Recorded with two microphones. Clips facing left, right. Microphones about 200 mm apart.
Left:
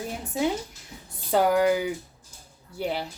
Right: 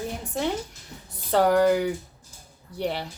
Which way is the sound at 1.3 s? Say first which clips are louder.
Right 2 dB; 5° left (ahead or behind).